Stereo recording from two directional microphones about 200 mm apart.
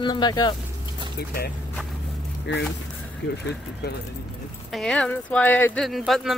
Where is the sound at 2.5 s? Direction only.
60° left (ahead or behind).